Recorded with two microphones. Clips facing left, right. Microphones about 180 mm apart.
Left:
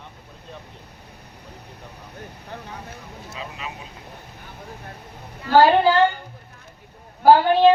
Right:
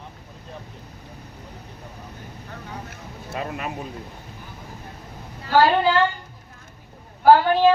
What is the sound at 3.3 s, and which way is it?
Speech, 60° right (ahead or behind).